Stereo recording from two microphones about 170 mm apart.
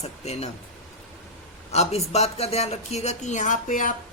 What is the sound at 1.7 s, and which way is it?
Speech, 40° left (ahead or behind).